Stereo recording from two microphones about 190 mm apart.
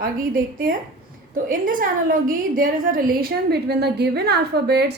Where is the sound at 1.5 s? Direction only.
45° right (ahead or behind).